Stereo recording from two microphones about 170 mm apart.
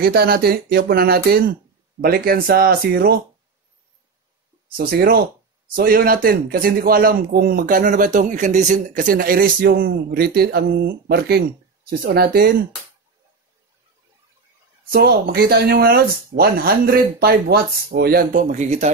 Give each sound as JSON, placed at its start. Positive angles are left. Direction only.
{"t": 0.0, "sound": "a man's voice", "side_deg": -65}
{"t": 4.7, "sound": "a man's voice", "side_deg": -60}
{"t": 14.9, "sound": "a man's voice", "side_deg": -65}
{"t": 18.3, "sound": "speech", "side_deg": -45}